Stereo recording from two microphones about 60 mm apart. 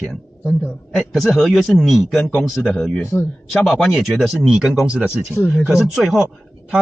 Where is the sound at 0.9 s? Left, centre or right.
Centre.